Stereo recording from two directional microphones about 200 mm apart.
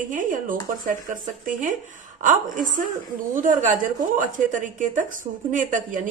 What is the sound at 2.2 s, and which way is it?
Speech, 40° right (ahead or behind).